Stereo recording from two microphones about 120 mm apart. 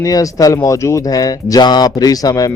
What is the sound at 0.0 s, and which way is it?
Speech, 30° left (ahead or behind).